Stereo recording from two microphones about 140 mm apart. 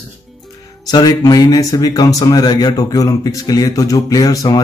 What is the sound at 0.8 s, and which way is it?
Speech, 25° left (ahead or behind).